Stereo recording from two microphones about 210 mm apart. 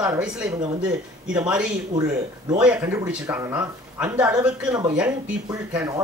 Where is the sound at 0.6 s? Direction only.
20° right (ahead or behind).